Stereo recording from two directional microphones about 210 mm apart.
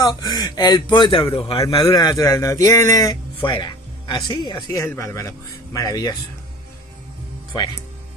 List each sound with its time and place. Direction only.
0.0 s speech: 15° left (ahead or behind)
7.5 s speech: 20° left (ahead or behind)